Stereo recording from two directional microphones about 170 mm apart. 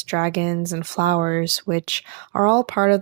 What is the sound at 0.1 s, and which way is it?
Speech, 50° right (ahead or behind).